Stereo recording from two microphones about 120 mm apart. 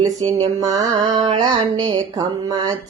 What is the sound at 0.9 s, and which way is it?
Mantra, 45° right (ahead or behind).